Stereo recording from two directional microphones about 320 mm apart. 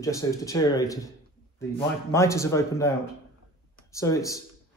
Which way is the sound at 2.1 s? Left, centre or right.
Centre.